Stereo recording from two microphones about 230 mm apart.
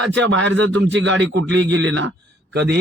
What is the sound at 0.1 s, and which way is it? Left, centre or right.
Speech, right.